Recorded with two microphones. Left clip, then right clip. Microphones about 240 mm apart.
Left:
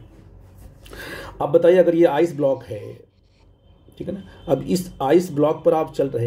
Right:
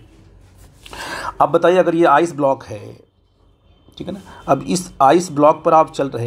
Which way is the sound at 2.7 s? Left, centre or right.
Right.